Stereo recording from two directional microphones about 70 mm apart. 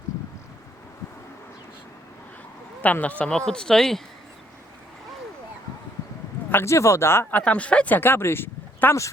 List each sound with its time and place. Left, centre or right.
2.8 s speech: left; by 4.0 s centre
6.5 s speech: left
7.3 s speech: centre; by 9.0 s left